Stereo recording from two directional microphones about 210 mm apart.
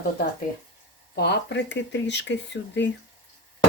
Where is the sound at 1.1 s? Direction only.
50° left (ahead or behind).